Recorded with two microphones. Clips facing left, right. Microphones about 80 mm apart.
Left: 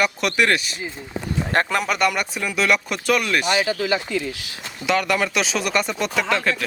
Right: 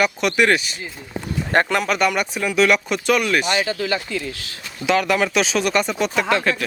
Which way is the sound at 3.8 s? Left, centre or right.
Centre.